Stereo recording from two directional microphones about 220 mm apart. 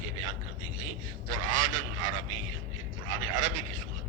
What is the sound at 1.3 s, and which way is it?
Speech, 65° right (ahead or behind).